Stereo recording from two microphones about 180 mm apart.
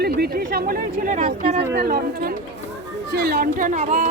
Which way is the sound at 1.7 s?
60° right (ahead or behind).